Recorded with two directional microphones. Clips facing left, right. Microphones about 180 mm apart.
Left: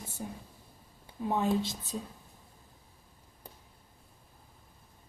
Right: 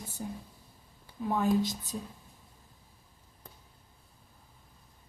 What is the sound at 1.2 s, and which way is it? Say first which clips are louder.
Speech: right 2 dB; 25° left (ahead or behind).